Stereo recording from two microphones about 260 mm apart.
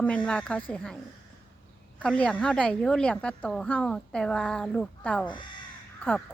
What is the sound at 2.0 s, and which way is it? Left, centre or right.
A woman's voice, centre.